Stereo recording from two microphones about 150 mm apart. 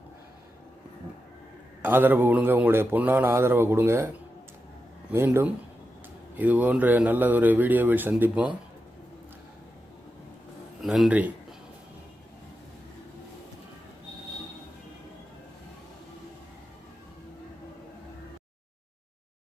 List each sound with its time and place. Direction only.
1.8 s a man's voice: 15° right (ahead or behind)
10.8 s a man's voice: centre (ahead or behind)